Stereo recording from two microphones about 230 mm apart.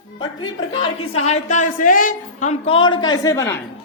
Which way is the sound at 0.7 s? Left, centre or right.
Left.